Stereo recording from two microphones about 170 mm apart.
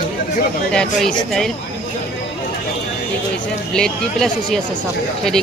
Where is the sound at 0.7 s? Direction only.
5° left (ahead or behind).